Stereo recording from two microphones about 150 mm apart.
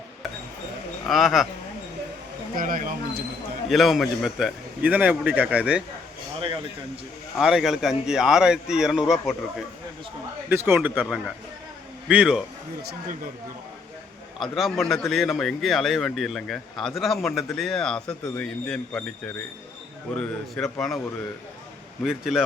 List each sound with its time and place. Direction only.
1.0 s speech: centre (ahead or behind)
2.6 s speech: 65° right (ahead or behind)
3.7 s a man's voice: centre (ahead or behind)
7.3 s speech: centre (ahead or behind)
10.5 s a man's voice: 15° right (ahead or behind)
14.3 s speech: centre (ahead or behind)
20.1 s speech: 5° left (ahead or behind)
22.0 s speech: centre (ahead or behind)